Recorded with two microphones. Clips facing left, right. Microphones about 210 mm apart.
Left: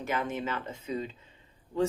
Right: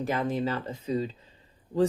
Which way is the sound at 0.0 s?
35° right (ahead or behind).